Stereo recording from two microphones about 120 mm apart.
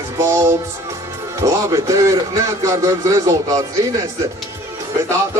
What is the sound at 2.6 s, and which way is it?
Speech, 25° right (ahead or behind).